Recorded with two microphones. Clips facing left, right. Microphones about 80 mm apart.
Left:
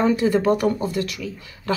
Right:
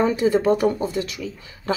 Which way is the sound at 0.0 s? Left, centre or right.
Right.